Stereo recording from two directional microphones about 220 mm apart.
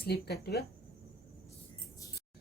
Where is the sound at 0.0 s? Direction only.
45° left (ahead or behind).